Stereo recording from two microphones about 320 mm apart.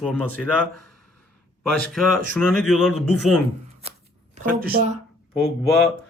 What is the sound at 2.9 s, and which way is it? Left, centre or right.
Speech, right.